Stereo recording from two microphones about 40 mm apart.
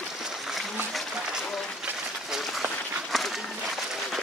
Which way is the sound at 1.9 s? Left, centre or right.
Right.